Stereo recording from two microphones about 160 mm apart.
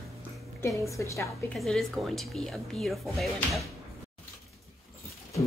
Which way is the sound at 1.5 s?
Centre (ahead or behind).